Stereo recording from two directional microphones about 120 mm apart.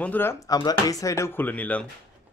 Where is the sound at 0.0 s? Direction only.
15° left (ahead or behind).